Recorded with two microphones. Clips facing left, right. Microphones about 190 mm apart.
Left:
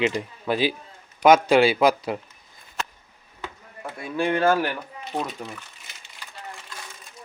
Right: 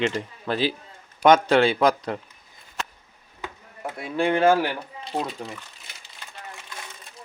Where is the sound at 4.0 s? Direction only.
20° right (ahead or behind).